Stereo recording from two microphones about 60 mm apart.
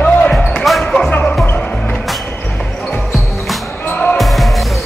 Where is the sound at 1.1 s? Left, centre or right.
Left.